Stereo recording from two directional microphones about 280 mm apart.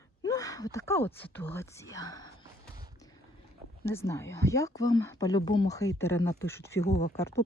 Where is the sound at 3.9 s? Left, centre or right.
Centre.